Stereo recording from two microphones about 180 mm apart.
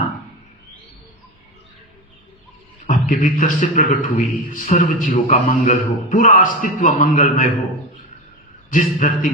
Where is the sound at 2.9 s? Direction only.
50° left (ahead or behind).